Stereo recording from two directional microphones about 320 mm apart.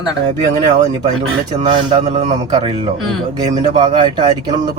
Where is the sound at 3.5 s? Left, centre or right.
Centre.